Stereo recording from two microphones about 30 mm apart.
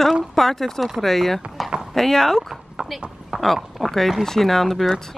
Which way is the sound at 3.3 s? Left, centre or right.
Centre.